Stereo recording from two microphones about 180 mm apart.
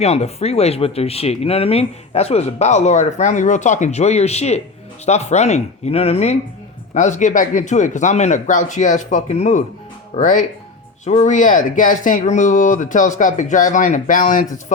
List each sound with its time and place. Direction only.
0.0 s speech: 35° left (ahead or behind)